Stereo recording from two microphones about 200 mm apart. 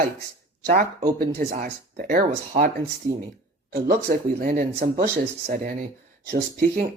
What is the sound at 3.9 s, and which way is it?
Speech, 45° right (ahead or behind).